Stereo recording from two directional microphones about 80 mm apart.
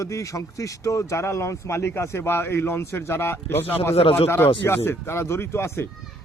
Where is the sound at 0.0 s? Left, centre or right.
Left.